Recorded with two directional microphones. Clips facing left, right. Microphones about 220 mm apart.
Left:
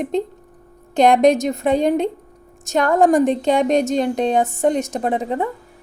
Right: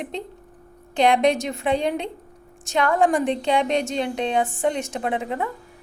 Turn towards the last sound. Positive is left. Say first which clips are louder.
# left 5 dB
turn(degrees=35)  # may be behind; listen again after turning